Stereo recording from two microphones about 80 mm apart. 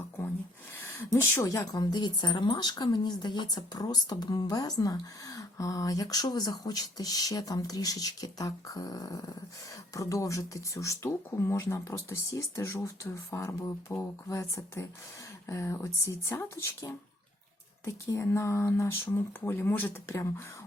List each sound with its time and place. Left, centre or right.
1.1 s speech: left
1.5 s a woman's voice: left